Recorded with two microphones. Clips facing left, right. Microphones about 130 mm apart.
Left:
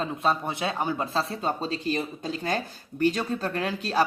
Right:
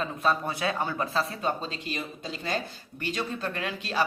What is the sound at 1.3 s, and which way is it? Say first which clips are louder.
Speech: left 2 dB; 30° left (ahead or behind).